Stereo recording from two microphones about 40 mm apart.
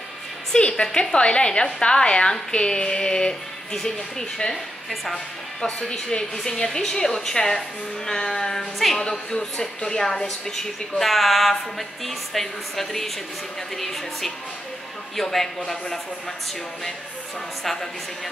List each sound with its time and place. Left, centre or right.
0.6 s a woman's voice: left; by 16.0 s centre